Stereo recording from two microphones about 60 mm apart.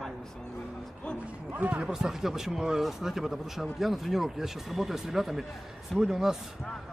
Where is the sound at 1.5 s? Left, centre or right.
Right.